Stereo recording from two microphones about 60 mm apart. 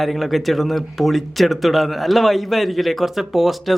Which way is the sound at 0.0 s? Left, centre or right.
Centre.